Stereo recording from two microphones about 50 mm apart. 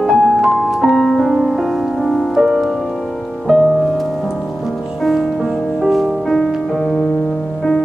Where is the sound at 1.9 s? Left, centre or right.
Centre.